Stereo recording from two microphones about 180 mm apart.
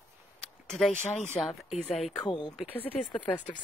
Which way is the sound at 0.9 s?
40° left (ahead or behind).